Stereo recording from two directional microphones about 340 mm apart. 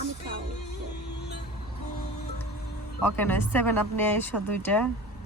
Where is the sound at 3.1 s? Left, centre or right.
Centre.